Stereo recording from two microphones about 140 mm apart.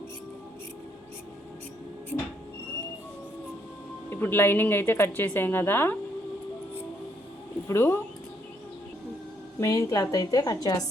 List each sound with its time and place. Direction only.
4.1 s a woman's voice: 15° left (ahead or behind)
7.7 s a woman's voice: 15° left (ahead or behind)
9.6 s a woman's voice: 20° left (ahead or behind)